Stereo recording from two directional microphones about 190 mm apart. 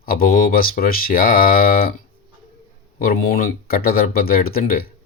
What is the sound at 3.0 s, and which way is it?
Speech, 50° left (ahead or behind).